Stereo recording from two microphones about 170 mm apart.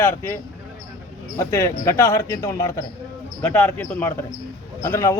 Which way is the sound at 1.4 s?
15° left (ahead or behind).